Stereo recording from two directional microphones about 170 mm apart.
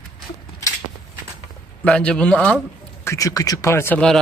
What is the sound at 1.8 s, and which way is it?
Speech, 5° left (ahead or behind).